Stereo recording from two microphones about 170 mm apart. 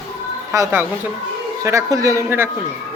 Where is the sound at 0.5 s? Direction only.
15° right (ahead or behind).